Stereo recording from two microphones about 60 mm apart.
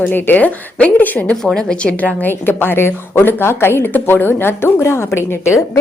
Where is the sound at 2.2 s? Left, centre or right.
Left.